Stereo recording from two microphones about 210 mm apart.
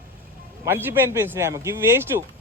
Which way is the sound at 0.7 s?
10° right (ahead or behind).